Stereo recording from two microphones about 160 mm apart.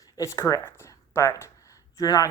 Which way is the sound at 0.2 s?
20° left (ahead or behind).